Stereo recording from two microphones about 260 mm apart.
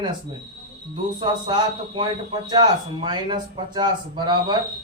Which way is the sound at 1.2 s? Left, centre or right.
Centre.